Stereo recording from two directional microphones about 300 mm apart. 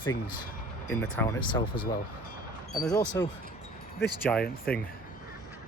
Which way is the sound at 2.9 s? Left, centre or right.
Centre.